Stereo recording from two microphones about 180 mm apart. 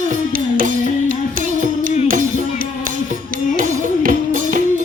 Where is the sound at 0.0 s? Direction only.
50° right (ahead or behind).